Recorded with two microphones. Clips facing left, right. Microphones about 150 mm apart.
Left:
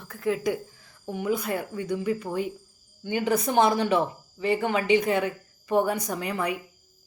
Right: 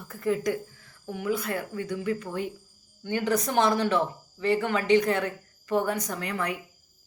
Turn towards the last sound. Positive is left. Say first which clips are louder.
# left 2 dB
turn(degrees=10)  # may be behind; listen again after turning